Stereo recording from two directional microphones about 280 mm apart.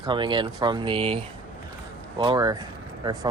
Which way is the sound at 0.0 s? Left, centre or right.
Centre.